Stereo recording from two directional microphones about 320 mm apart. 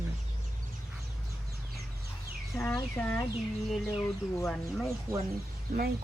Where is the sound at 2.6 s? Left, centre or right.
Centre.